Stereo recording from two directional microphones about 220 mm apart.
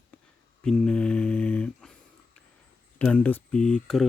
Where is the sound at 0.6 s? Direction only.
Centre (ahead or behind).